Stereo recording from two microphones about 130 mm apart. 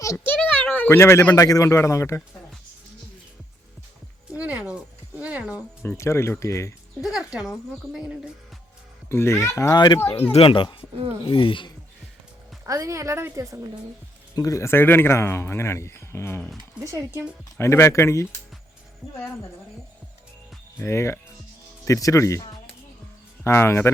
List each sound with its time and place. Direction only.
0.0 s a sound: 25° left (ahead or behind)
0.3 s a sound: 10° left (ahead or behind)
1.4 s speech: 25° left (ahead or behind)
4.4 s a sound: 10° right (ahead or behind)
6.0 s speech: 20° left (ahead or behind)
7.0 s speech: 5° right (ahead or behind)
9.0 s speech: 20° left (ahead or behind)
10.3 s speech: 45° left (ahead or behind)
12.6 s a woman's voice: 25° right (ahead or behind)
14.3 s speech: 25° left (ahead or behind)
16.8 s a woman's voice: 25° right (ahead or behind)
17.6 s speech: 20° left (ahead or behind)
20.7 s speech: 20° left (ahead or behind)